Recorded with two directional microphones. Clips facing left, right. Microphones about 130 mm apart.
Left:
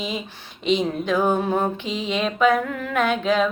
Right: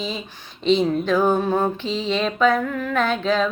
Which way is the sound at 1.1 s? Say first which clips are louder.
Even; 20° left (ahead or behind).